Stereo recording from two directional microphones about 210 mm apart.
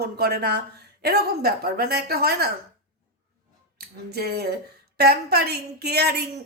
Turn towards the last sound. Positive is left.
turn(degrees=-50)  # may be behind; listen again after turning